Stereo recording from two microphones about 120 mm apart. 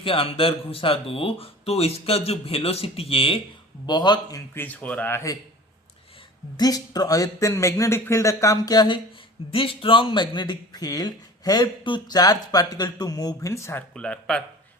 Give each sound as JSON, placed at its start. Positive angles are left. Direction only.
{"t": 0.0, "sound": "speech", "side_deg": 50}
{"t": 3.8, "sound": "speech", "side_deg": 35}
{"t": 4.5, "sound": "speech", "side_deg": 15}
{"t": 6.6, "sound": "speech", "side_deg": 30}
{"t": 9.5, "sound": "speech", "side_deg": 50}
{"t": 13.9, "sound": "speech", "side_deg": 5}